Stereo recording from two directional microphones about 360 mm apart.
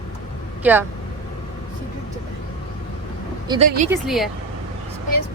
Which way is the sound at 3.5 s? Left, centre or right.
Centre.